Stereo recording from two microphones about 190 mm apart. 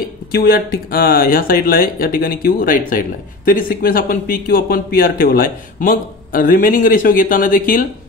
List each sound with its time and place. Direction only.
0.3 s speech: 55° left (ahead or behind)